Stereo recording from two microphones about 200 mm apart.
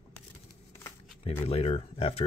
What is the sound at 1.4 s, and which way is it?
Speech, 30° left (ahead or behind).